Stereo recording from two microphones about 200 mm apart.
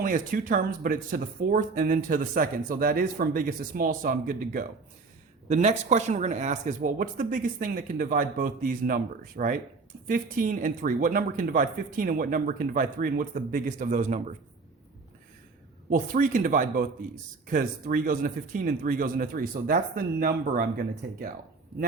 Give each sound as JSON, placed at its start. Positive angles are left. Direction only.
{"t": 0.0, "sound": "speech", "side_deg": -40}
{"t": 15.9, "sound": "speech", "side_deg": -40}